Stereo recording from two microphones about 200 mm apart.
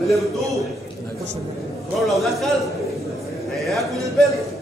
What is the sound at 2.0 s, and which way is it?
Speech, centre (ahead or behind).